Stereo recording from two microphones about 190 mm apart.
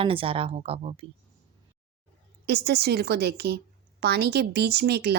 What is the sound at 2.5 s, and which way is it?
Speech, 60° right (ahead or behind).